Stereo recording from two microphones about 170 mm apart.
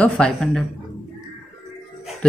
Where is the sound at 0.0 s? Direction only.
5° left (ahead or behind).